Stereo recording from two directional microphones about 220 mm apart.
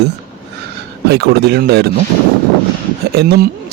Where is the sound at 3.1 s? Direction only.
45° right (ahead or behind).